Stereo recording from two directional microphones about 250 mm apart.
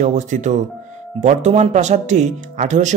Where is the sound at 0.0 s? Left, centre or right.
Right.